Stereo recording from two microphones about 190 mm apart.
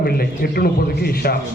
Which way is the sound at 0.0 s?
55° left (ahead or behind).